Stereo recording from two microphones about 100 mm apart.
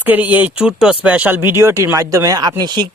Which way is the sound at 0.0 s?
15° right (ahead or behind).